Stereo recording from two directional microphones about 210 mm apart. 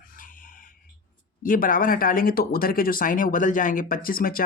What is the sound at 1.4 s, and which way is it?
Speech, 40° left (ahead or behind).